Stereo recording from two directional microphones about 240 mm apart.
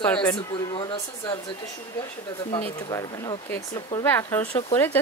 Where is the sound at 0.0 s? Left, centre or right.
Centre.